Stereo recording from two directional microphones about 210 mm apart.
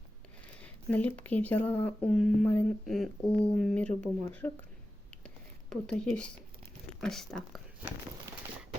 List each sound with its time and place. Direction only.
0.6 s speech: 5° left (ahead or behind)
5.2 s a sound: 5° left (ahead or behind)
7.0 s speech: centre (ahead or behind)